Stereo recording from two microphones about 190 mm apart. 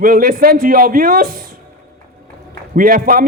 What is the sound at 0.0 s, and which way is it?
A man's voice, 50° right (ahead or behind).